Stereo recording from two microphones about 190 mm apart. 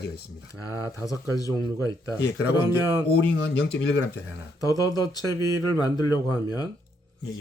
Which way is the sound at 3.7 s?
70° left (ahead or behind).